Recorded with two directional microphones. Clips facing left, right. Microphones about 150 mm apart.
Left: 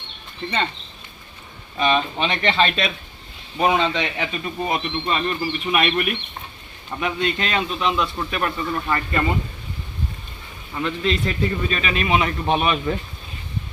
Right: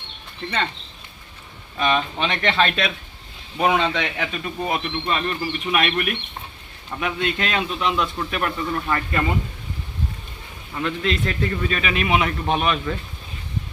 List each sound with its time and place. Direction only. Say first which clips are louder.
0.4 s a man's voice: left 2 dB; 5° left (ahead or behind)
1.8 s a man's voice: left 1 dB; centre (ahead or behind)
10.8 s a man's voice: left 1 dB; centre (ahead or behind)
12.4 s a man's voice: left 1 dB; 5° left (ahead or behind)
12.7 s speech: left 3 dB; 25° left (ahead or behind)